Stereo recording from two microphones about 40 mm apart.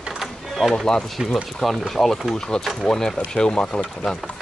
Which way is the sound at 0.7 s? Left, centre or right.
Centre.